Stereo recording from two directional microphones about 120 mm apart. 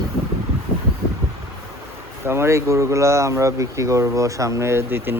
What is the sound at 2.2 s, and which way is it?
Speech, 20° right (ahead or behind).